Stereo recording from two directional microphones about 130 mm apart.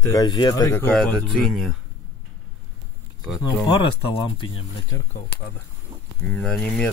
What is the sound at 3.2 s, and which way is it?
Speech, centre (ahead or behind).